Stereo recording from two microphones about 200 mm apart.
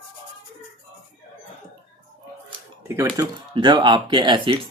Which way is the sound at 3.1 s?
20° right (ahead or behind).